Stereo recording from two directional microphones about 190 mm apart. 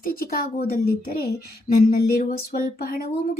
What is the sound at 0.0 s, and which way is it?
Speech, 50° left (ahead or behind).